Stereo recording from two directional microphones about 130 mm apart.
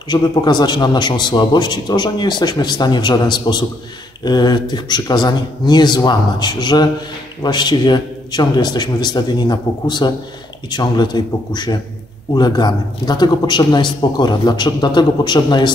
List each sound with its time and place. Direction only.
0.1 s a man's voice: 35° left (ahead or behind)